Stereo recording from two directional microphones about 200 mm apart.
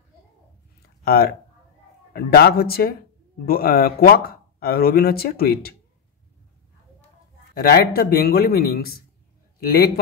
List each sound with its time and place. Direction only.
1.0 s speech: 50° left (ahead or behind)
7.6 s speech: 50° left (ahead or behind)